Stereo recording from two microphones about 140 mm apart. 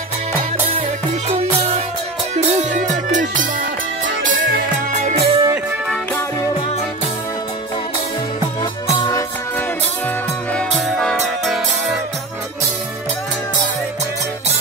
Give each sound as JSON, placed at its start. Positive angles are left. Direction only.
{"t": 1.3, "sound": "music", "side_deg": -50}
{"t": 4.9, "sound": "music", "side_deg": -50}
{"t": 11.0, "sound": "music", "side_deg": 0}